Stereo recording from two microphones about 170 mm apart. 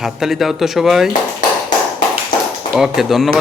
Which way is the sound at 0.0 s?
Centre (ahead or behind).